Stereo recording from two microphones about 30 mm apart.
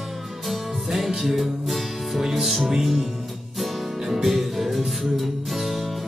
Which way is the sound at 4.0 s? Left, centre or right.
Centre.